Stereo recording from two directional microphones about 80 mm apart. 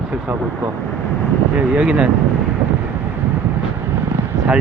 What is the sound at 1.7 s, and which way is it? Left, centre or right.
Speech, centre.